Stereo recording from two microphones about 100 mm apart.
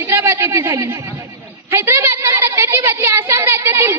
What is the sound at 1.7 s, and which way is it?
Speech, 25° right (ahead or behind).